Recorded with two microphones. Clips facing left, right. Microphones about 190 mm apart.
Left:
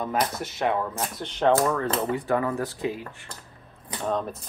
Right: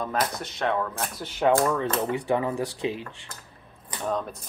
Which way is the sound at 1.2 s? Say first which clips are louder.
Even; 5° right (ahead or behind).